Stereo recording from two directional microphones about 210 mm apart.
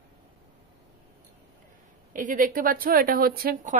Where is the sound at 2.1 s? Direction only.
40° right (ahead or behind).